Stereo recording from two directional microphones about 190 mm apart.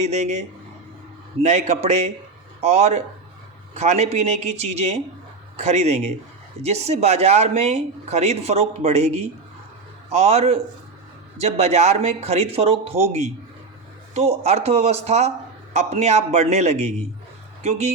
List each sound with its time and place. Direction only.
0.0 s speech: 35° right (ahead or behind)